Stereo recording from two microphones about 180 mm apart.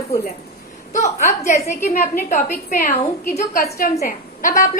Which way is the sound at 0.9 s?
15° left (ahead or behind).